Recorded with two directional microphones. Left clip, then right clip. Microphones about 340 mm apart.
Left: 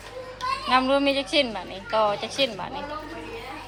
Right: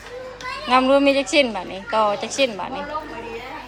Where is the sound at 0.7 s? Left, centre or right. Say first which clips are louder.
Right 6 dB; centre.